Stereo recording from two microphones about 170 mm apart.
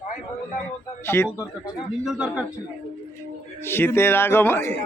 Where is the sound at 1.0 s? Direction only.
15° left (ahead or behind).